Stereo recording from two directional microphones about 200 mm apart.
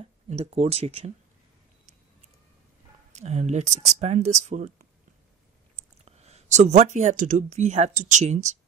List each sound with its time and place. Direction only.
0.0 s speech: 30° right (ahead or behind)
3.1 s speech: 35° right (ahead or behind)